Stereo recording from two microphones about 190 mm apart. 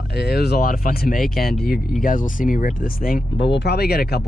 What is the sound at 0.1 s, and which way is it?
Speech, 60° left (ahead or behind).